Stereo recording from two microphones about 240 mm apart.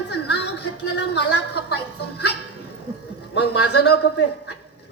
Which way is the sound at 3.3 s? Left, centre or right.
Left.